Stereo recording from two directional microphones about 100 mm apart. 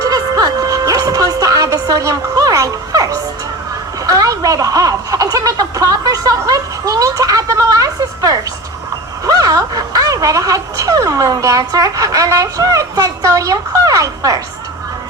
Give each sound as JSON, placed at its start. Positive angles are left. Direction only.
{"t": 0.0, "sound": "music", "side_deg": -40}
{"t": 4.0, "sound": "speech", "side_deg": -35}